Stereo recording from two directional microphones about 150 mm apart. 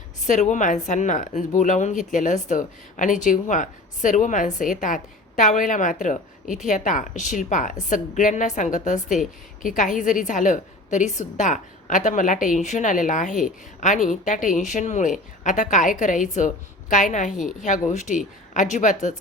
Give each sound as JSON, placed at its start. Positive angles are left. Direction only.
{"t": 0.2, "sound": "speech", "side_deg": 55}